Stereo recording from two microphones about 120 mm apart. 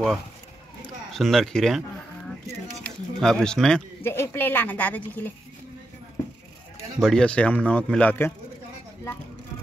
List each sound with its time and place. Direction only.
1.1 s speech: centre (ahead or behind)
2.8 s speech: 5° left (ahead or behind)
4.0 s a man's voice: 20° left (ahead or behind)
7.0 s a man's voice: 5° left (ahead or behind)